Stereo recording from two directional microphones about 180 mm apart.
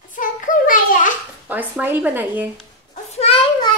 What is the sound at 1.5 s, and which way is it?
Speech, 10° right (ahead or behind).